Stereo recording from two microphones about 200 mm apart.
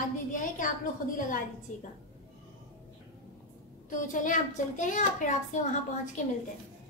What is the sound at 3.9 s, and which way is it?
A woman's voice, 40° left (ahead or behind).